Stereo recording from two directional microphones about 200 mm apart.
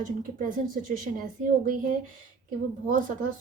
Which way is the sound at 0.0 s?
40° right (ahead or behind).